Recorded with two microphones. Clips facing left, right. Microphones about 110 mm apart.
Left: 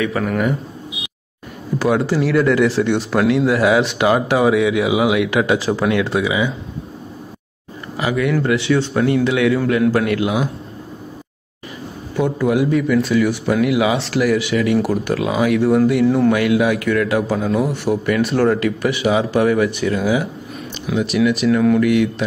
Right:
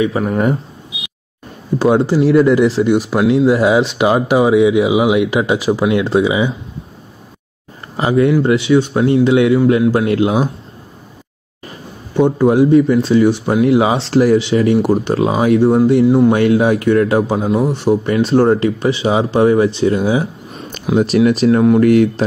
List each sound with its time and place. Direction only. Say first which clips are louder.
0.0 s speech: right 4 dB; 20° right (ahead or behind)
1.8 s speech: right 5 dB; 25° right (ahead or behind)
8.0 s speech: right 6 dB; 30° right (ahead or behind)
12.2 s speech: right 6 dB; 30° right (ahead or behind)